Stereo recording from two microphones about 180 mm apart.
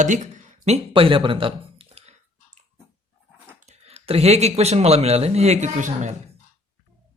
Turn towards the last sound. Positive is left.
turn(degrees=-40)  # may be behind; listen again after turning